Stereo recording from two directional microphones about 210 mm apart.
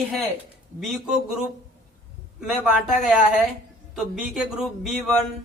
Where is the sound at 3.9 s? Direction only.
Centre (ahead or behind).